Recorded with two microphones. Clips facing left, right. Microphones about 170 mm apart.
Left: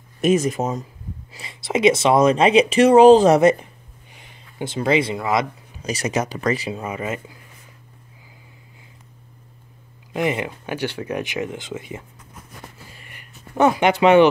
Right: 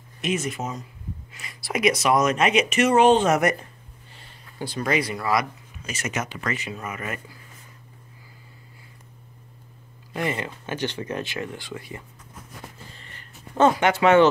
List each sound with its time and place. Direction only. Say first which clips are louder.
0.2 s speech: left 9 dB; 40° left (ahead or behind)
1.3 s speech: left 6 dB; 25° left (ahead or behind)
4.1 s speech: left 2 dB; 15° left (ahead or behind)
5.8 s speech: left 7 dB; 35° left (ahead or behind)
10.1 s speech: left 5 dB; 15° left (ahead or behind)
12.9 s a sound: left 1 dB; 10° left (ahead or behind)